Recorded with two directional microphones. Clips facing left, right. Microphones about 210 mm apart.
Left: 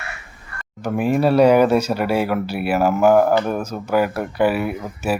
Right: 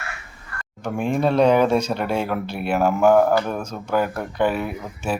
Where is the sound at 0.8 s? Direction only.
5° left (ahead or behind).